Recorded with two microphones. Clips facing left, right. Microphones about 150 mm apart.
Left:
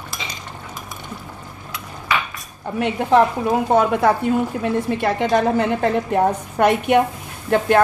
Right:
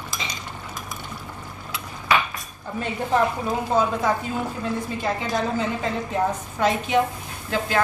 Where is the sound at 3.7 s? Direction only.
70° left (ahead or behind).